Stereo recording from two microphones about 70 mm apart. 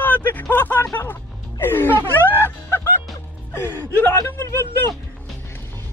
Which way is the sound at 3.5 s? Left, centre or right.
Left.